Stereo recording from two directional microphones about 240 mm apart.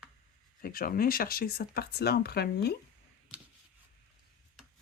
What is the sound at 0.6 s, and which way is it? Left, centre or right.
Speech, left.